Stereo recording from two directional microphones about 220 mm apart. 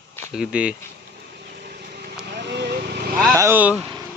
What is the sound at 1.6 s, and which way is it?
Vehicle, 45° right (ahead or behind).